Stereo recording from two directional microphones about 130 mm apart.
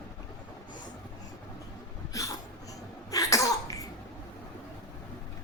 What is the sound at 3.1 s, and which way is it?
Cough, 25° left (ahead or behind).